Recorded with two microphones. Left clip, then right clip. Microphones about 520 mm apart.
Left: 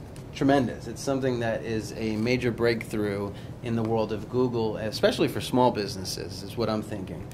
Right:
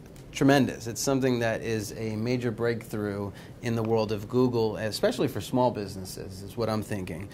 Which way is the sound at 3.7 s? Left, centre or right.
Right.